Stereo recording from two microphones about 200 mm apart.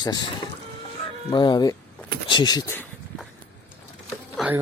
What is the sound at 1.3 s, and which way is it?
Speech, 20° left (ahead or behind).